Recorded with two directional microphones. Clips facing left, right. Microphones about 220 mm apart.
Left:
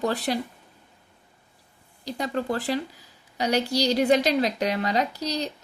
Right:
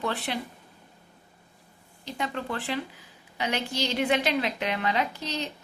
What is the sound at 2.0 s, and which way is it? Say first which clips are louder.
A woman's voice: left 5 dB; 40° left (ahead or behind).